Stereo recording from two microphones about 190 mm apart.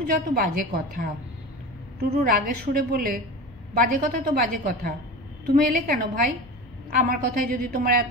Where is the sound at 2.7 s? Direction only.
50° right (ahead or behind).